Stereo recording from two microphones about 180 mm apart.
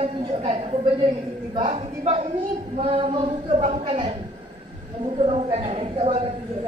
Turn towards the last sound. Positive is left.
turn(degrees=-30)  # may be behind; listen again after turning